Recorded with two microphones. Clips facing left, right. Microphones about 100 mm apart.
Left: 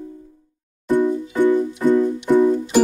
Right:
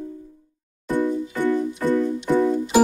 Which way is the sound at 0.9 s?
15° left (ahead or behind).